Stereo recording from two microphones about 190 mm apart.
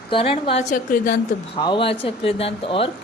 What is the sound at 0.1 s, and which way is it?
Speech, 30° left (ahead or behind).